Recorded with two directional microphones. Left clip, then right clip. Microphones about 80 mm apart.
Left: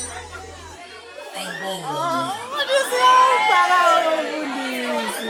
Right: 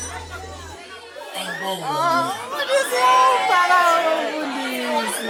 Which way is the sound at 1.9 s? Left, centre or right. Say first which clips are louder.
Right 4 dB; centre.